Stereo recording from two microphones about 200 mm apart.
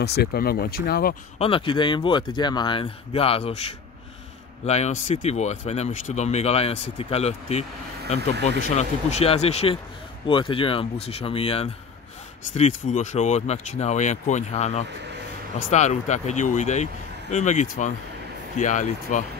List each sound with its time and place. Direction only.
0.0 s speech: 55° left (ahead or behind)
1.4 s speech: 25° left (ahead or behind)
8.4 s speech: 60° right (ahead or behind)
8.6 s speech: 35° left (ahead or behind)